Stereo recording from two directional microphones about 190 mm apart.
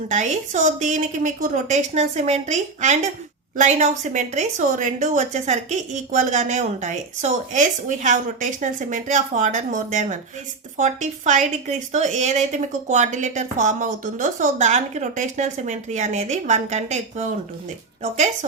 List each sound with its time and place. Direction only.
0.1 s speech: 40° right (ahead or behind)